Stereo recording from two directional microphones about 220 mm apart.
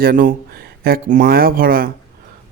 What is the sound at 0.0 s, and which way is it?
Speech, 40° right (ahead or behind).